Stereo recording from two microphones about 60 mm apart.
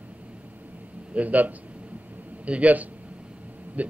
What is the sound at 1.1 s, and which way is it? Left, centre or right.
A man's voice, right.